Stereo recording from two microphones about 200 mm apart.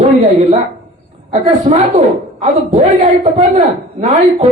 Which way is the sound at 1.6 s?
35° right (ahead or behind).